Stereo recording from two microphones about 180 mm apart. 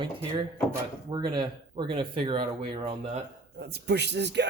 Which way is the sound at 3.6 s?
65° right (ahead or behind).